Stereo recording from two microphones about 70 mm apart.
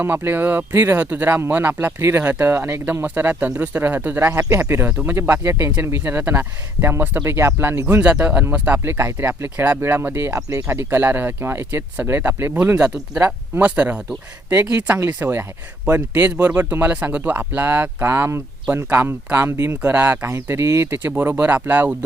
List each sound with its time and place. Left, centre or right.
0.0 s speech: right
4.9 s speech: centre
5.1 s speech: right
5.8 s speech: right
7.9 s speech: right
8.8 s speech: right
12.7 s speech: centre
20.2 s speech: right
21.0 s speech: right